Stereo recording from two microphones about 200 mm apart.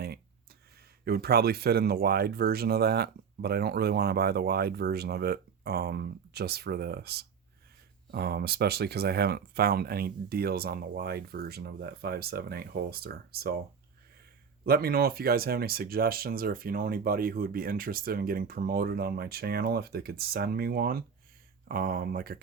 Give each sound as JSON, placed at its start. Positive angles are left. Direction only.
{"t": 1.0, "sound": "speech", "side_deg": -50}
{"t": 14.6, "sound": "speech", "side_deg": -50}